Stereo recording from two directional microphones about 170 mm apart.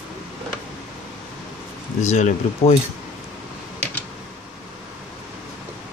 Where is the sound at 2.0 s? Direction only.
45° left (ahead or behind).